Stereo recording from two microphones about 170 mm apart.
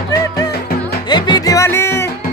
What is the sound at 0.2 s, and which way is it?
Music, 20° left (ahead or behind).